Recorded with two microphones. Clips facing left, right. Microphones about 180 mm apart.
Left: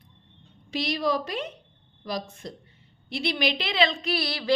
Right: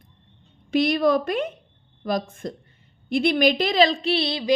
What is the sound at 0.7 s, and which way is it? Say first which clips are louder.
A woman's voice: right 7 dB; 55° right (ahead or behind).